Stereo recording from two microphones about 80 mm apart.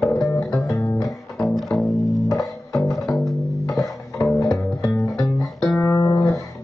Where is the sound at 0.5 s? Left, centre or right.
Left.